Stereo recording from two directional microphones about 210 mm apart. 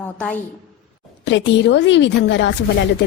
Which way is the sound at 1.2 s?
60° left (ahead or behind).